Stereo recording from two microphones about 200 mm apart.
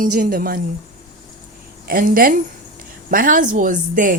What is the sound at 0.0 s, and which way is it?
Speech, 45° right (ahead or behind).